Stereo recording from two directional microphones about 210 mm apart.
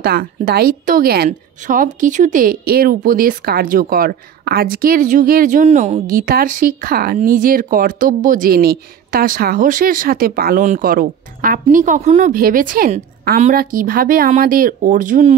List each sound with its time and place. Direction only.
0.0 s a woman's voice: 45° right (ahead or behind)